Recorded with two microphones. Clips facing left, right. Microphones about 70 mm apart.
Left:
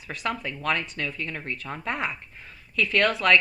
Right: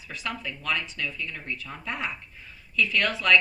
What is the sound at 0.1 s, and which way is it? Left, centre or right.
Speech, left.